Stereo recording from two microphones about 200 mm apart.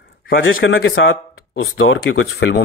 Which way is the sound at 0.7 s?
75° left (ahead or behind).